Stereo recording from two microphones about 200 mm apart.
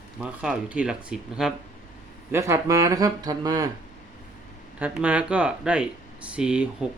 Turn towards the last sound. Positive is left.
turn(degrees=-5)  # may be behind; listen again after turning